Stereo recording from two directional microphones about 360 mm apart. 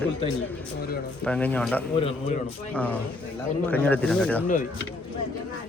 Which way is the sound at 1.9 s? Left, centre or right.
Centre.